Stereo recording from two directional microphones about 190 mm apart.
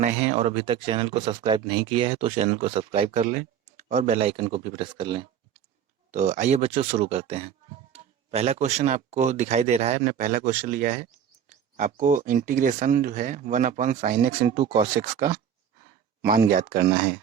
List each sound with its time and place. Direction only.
0.0 s speech: 35° right (ahead or behind)
6.1 s speech: 45° right (ahead or behind)
16.2 s speech: 50° right (ahead or behind)